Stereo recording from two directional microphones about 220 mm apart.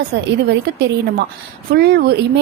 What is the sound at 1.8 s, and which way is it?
Speech, 45° right (ahead or behind).